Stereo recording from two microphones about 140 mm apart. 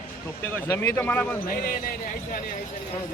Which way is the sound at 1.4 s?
90° left.